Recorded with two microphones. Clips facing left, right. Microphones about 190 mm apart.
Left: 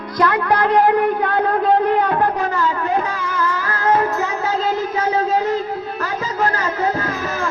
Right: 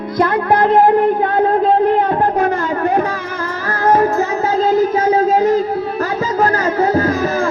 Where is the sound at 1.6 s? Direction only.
30° right (ahead or behind).